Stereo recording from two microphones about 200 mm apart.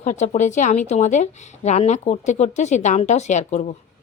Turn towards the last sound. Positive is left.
turn(degrees=35)  # may be behind; listen again after turning